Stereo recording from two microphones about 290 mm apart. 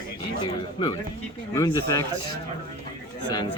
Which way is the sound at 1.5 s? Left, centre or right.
Centre.